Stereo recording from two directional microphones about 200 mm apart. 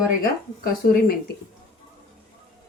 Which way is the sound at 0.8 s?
45° left (ahead or behind).